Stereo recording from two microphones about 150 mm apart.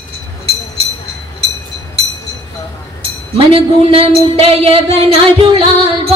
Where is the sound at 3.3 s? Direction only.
40° right (ahead or behind).